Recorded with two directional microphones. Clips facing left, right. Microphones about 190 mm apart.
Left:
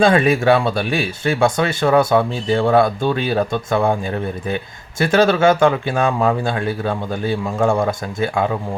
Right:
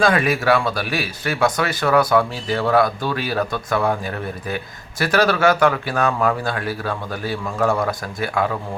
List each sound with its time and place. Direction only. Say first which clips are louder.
0.0 s speech: left 4 dB; 25° left (ahead or behind)